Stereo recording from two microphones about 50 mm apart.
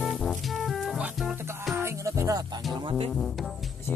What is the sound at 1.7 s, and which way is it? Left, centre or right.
Music, right.